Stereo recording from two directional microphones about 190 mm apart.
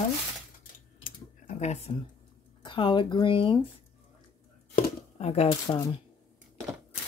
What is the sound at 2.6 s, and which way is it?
Speech, 25° left (ahead or behind).